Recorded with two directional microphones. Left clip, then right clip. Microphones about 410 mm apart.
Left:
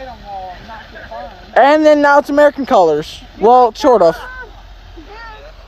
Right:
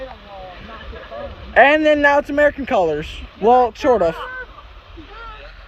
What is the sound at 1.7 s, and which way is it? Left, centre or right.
Speech, centre.